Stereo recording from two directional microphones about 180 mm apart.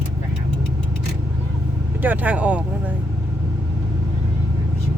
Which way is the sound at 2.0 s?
10° right (ahead or behind).